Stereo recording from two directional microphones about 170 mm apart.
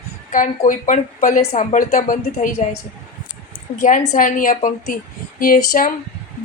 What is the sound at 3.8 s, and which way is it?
Speech, 50° left (ahead or behind).